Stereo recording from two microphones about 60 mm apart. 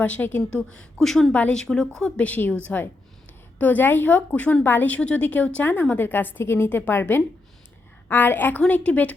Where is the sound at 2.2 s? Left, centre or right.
Left.